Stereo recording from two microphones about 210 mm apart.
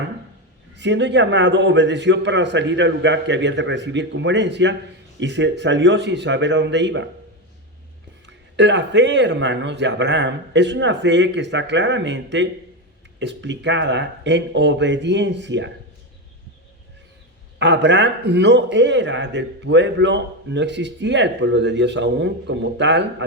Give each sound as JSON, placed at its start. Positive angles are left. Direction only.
{"t": 0.8, "sound": "a man's voice", "side_deg": -55}
{"t": 8.3, "sound": "a man's voice", "side_deg": -55}
{"t": 17.6, "sound": "a man's voice", "side_deg": -60}